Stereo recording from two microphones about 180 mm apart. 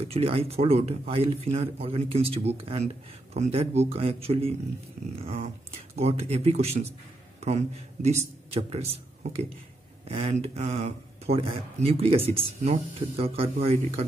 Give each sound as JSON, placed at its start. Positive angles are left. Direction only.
{"t": 0.0, "sound": "a man's voice", "side_deg": -30}